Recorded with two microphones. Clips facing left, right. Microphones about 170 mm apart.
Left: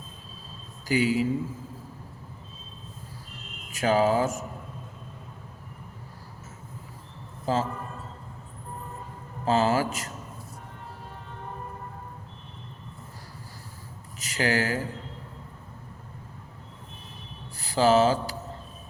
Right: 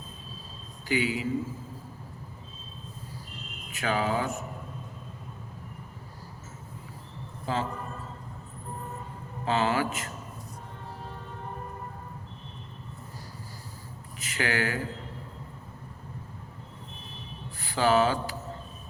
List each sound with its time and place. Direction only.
0.9 s speech: 40° left (ahead or behind)
3.7 s speech: 40° left (ahead or behind)
7.4 s speech: 40° left (ahead or behind)
9.4 s speech: 40° left (ahead or behind)
14.2 s speech: 40° left (ahead or behind)
17.6 s speech: 35° left (ahead or behind)